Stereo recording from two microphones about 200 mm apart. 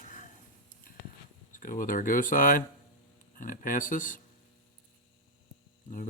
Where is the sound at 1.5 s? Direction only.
40° left (ahead or behind).